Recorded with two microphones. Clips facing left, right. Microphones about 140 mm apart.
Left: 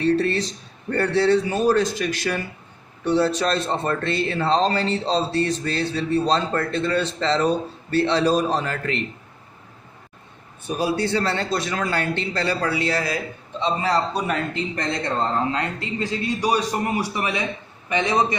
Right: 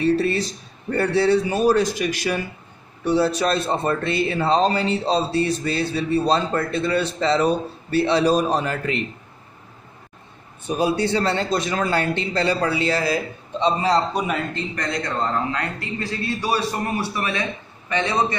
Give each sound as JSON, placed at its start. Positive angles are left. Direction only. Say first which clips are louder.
{"t": 0.0, "sound": "speech", "louder": "right 1 dB", "side_deg": -5}
{"t": 10.8, "sound": "a man's voice", "louder": "right 2 dB", "side_deg": -20}
{"t": 13.8, "sound": "speech", "louder": "right 2 dB", "side_deg": -15}
{"t": 14.8, "sound": "a man's voice", "louder": "even", "side_deg": 25}